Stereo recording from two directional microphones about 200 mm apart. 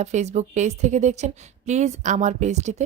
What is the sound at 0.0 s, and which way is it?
A woman's voice, 35° right (ahead or behind).